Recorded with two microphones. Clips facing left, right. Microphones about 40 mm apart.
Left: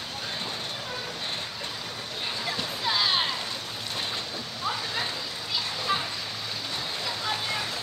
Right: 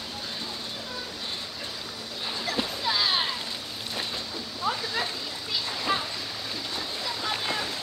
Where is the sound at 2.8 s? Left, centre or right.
Centre.